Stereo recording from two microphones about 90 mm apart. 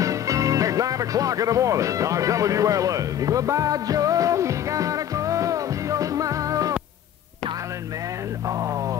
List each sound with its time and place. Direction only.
0.0 s speech: 40° right (ahead or behind)